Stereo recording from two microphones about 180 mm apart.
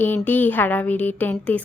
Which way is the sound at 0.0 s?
10° left (ahead or behind).